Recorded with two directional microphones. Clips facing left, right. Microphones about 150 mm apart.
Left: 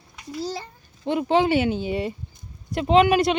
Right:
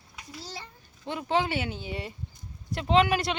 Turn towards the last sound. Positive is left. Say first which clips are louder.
# left 6 dB
turn(degrees=20)  # may be behind; listen again after turning